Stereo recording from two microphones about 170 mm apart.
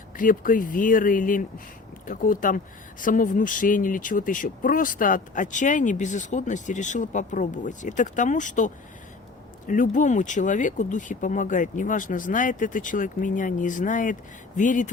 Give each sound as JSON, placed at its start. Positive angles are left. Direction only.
{"t": 0.2, "sound": "speech", "side_deg": 50}